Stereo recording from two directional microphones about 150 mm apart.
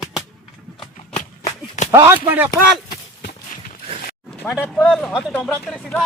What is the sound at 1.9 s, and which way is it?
Speech, 15° right (ahead or behind).